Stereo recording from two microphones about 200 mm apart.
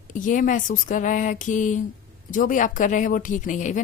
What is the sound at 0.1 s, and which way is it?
Speech, 40° left (ahead or behind).